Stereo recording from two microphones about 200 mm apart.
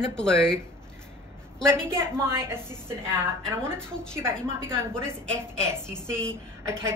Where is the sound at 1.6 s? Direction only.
15° right (ahead or behind).